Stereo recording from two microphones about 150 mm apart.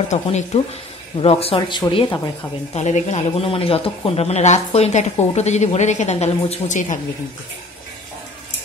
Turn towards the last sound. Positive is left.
turn(degrees=55)  # may be behind; listen again after turning